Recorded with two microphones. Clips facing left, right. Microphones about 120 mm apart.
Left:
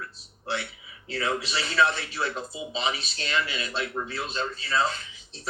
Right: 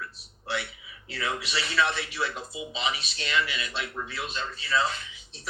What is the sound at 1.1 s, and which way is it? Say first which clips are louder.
Speech: left 3 dB; 30° left (ahead or behind).